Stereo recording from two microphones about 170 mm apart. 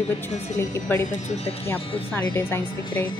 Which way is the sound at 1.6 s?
15° left (ahead or behind).